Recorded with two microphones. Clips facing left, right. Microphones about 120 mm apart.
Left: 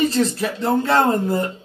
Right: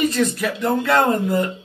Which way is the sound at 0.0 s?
30° left (ahead or behind).